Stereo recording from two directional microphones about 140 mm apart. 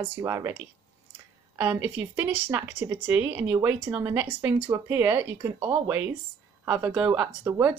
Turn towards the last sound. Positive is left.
turn(degrees=-10)  # may be behind; listen again after turning